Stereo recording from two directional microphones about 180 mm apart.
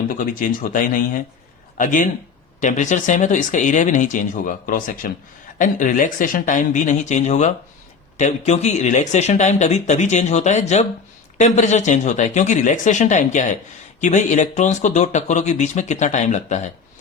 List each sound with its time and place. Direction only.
0.1 s speech: 50° left (ahead or behind)